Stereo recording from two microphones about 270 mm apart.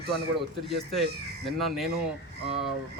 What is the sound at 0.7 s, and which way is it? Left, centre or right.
A man's voice, centre.